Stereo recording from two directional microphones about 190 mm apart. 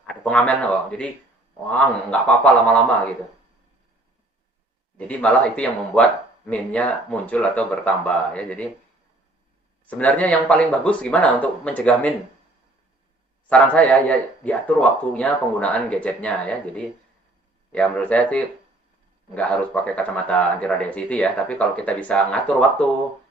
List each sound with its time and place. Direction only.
0.0 s speech: 5° left (ahead or behind)
4.9 s speech: 5° left (ahead or behind)
9.8 s speech: 10° left (ahead or behind)
13.5 s speech: 5° left (ahead or behind)